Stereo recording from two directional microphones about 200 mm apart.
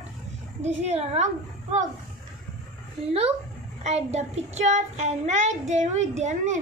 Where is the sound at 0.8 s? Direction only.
35° right (ahead or behind).